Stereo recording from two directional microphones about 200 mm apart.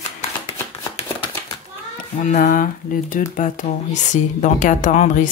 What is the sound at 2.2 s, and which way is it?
Speech, 40° left (ahead or behind).